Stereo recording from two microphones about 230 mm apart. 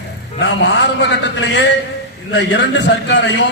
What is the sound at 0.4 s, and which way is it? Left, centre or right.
A man's voice, left.